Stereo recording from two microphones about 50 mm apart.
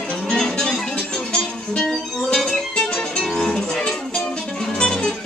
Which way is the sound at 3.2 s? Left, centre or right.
Centre.